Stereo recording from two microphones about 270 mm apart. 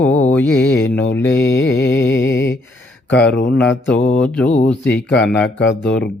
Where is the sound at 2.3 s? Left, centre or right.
Centre.